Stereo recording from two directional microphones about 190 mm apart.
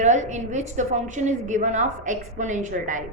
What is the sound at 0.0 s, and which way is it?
A woman's voice, 40° right (ahead or behind).